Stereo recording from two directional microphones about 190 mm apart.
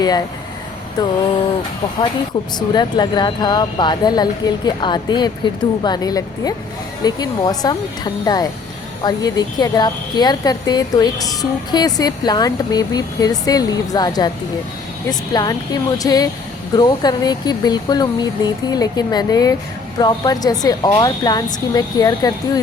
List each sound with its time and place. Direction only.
1.0 s a woman's voice: 20° left (ahead or behind)
2.6 s a woman's voice: 25° left (ahead or behind)
15.3 s a woman's voice: 20° left (ahead or behind)